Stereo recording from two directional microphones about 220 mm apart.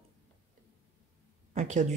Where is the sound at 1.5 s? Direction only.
30° right (ahead or behind).